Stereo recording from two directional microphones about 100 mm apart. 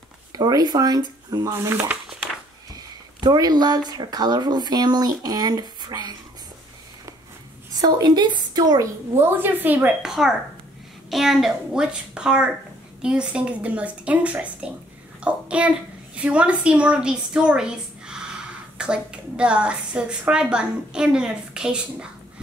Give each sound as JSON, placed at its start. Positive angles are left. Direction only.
{"t": 0.3, "sound": "speech", "side_deg": -40}
{"t": 1.5, "sound": "a woman's voice", "side_deg": -25}
{"t": 2.7, "sound": "speech", "side_deg": -40}
{"t": 7.7, "sound": "speech", "side_deg": -45}
{"t": 9.2, "sound": "a woman's voice", "side_deg": -20}
{"t": 10.0, "sound": "a woman's voice", "side_deg": -5}